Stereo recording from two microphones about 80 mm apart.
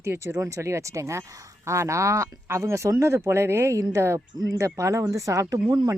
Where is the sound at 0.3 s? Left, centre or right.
Right.